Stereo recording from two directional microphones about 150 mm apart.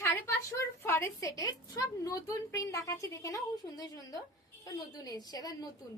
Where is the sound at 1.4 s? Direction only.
25° left (ahead or behind).